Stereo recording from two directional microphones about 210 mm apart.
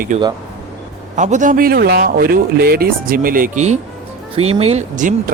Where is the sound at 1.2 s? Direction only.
35° right (ahead or behind).